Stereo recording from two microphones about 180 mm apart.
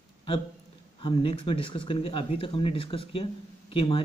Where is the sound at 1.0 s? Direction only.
30° left (ahead or behind).